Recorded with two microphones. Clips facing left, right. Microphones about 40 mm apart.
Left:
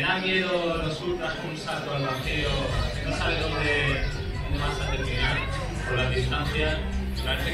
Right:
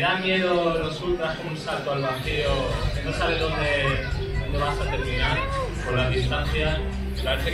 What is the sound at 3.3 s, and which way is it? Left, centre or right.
Speech, right.